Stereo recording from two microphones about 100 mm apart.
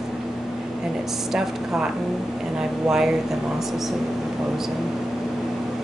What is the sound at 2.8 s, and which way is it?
Speech, 5° right (ahead or behind).